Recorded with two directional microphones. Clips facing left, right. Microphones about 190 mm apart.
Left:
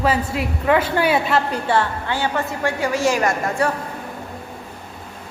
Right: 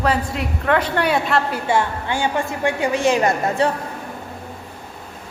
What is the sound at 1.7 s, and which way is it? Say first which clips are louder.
A woman's voice: even; 15° right (ahead or behind).